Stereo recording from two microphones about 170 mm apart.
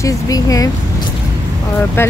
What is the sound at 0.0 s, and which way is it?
Speech, 20° left (ahead or behind).